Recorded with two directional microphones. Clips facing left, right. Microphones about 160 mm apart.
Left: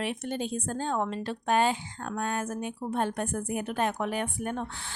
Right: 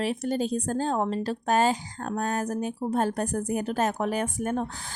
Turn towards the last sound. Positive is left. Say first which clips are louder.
# right 5 dB
turn(degrees=-40)  # may be behind; listen again after turning